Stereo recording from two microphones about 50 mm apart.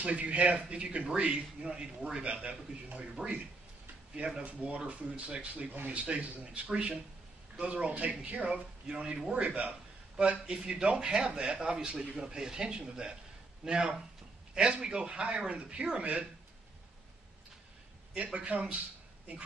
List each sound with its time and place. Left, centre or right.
0.0 s a man's voice: right
4.4 s a man's voice: right
18.1 s speech: right